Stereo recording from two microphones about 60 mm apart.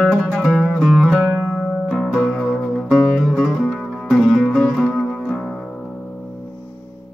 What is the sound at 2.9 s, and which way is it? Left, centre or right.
Music, centre.